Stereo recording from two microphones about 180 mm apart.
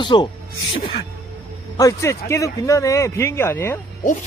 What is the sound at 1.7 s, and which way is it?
A man's voice, 20° left (ahead or behind).